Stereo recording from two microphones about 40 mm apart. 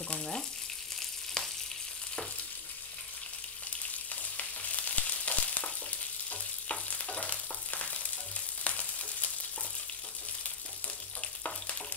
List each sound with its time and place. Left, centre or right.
0.1 s frying: left
0.9 s frying: centre
4.1 s frying: left
5.6 s stir: left
8.6 s frying: left
11.1 s frying: left